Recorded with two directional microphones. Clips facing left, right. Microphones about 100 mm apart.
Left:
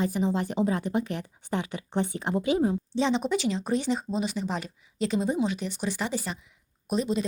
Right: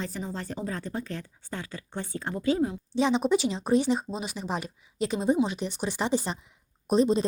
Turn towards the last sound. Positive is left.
turn(degrees=-30)  # may be behind; listen again after turning